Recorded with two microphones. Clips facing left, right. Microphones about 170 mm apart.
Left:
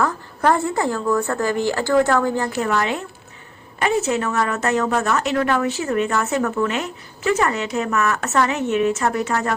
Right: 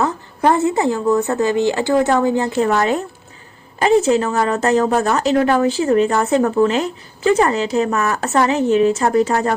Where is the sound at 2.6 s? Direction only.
40° right (ahead or behind).